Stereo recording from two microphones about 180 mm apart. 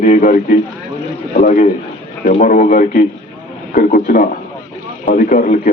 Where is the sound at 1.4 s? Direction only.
45° left (ahead or behind).